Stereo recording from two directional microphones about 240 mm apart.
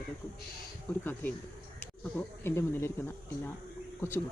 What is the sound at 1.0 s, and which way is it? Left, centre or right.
Speech, centre.